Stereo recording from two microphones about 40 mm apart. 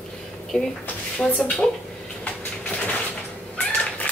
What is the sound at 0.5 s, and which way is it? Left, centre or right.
Speech, centre.